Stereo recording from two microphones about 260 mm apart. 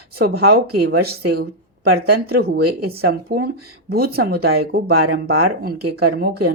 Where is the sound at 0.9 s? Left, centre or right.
Right.